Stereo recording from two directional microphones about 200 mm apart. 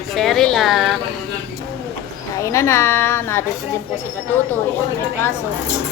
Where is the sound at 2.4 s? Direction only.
15° left (ahead or behind).